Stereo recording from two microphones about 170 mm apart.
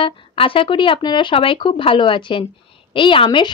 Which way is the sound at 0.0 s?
30° left (ahead or behind).